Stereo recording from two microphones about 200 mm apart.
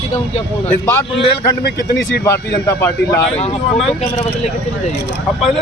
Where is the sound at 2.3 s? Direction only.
15° left (ahead or behind).